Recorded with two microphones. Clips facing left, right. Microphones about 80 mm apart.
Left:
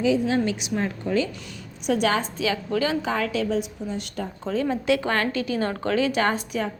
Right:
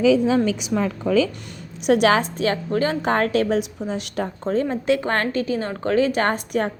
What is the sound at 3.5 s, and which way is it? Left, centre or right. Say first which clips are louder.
Speech: right 4 dB; right.